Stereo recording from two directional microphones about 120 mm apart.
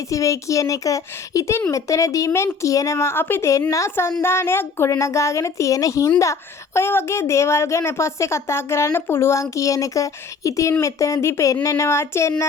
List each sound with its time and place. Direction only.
0.1 s a woman's voice: 25° left (ahead or behind)